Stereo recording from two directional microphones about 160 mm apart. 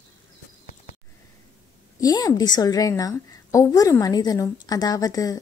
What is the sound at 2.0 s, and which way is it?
Speech, 25° left (ahead or behind).